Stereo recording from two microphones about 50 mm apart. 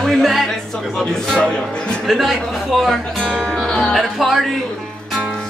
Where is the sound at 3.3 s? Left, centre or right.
Centre.